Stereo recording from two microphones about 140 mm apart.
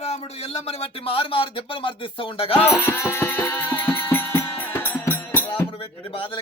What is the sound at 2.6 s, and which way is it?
Music, 20° left (ahead or behind).